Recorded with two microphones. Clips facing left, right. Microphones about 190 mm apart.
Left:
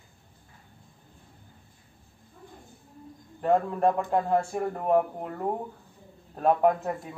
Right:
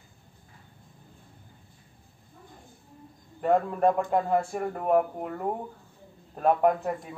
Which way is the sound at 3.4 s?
Centre (ahead or behind).